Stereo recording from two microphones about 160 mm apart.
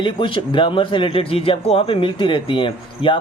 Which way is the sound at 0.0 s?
30° left (ahead or behind).